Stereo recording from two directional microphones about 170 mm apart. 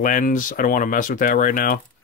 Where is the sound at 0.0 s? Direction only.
50° left (ahead or behind).